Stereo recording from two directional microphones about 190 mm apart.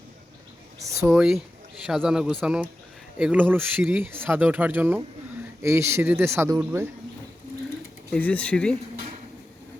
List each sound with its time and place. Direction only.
0.8 s speech: 15° right (ahead or behind)
1.0 s a man's voice: centre (ahead or behind)
8.1 s speech: 5° left (ahead or behind)